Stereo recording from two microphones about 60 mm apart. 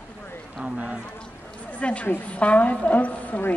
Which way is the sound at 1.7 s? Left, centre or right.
Left.